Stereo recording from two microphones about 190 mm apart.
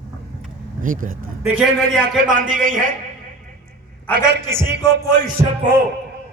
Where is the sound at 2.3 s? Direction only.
45° right (ahead or behind).